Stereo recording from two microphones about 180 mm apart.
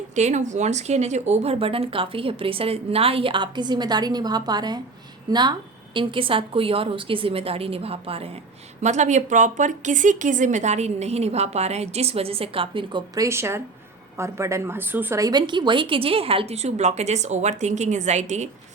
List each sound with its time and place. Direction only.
0.2 s a woman's voice: 40° right (ahead or behind)